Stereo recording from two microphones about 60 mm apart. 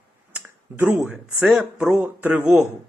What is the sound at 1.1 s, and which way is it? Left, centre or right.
Speech, right.